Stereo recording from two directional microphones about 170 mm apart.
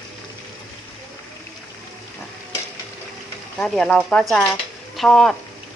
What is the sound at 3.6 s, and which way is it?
Speech, 5° left (ahead or behind).